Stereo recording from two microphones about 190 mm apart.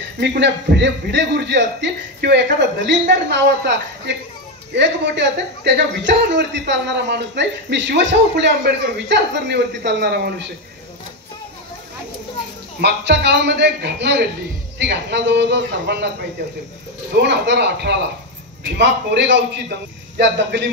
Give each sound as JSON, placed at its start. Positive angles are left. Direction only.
{"t": 0.2, "sound": "a man's voice", "side_deg": -60}
{"t": 12.8, "sound": "a man's voice", "side_deg": -65}
{"t": 17.1, "sound": "a man's voice", "side_deg": -60}